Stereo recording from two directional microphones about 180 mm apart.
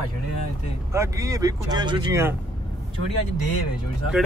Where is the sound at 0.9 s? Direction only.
15° right (ahead or behind).